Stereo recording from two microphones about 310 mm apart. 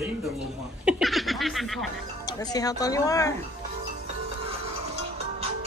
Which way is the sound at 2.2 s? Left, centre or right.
Centre.